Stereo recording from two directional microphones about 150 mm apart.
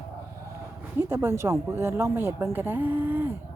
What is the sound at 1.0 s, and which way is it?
Speech, 15° right (ahead or behind).